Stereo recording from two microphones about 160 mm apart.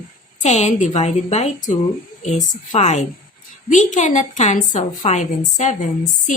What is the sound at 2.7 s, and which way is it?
A woman's voice, 45° left (ahead or behind).